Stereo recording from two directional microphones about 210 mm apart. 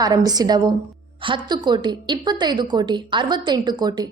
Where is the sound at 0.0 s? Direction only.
15° right (ahead or behind).